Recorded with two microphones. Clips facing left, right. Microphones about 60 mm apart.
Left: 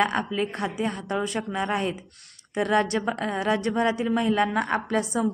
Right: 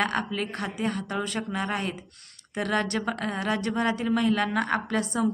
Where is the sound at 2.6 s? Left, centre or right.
Left.